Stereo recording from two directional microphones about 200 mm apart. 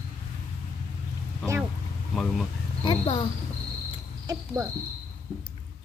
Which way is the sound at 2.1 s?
Centre (ahead or behind).